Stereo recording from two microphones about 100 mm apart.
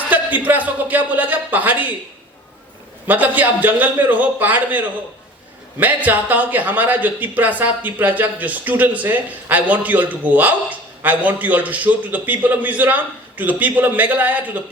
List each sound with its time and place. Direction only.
0.1 s a man's voice: 15° right (ahead or behind)
3.1 s a man's voice: 15° right (ahead or behind)
5.8 s a man's voice: 15° right (ahead or behind)